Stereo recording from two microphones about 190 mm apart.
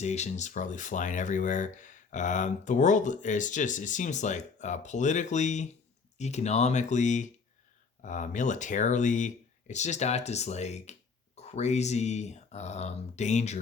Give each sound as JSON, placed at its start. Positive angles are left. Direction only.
{"t": 0.0, "sound": "speech", "side_deg": 35}